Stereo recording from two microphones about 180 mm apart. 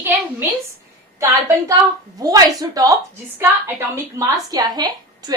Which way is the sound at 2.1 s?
20° right (ahead or behind).